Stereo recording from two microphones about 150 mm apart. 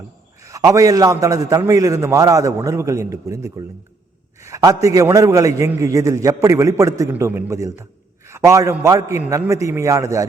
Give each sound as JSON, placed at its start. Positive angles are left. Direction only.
{"t": 0.4, "sound": "a man's voice", "side_deg": -20}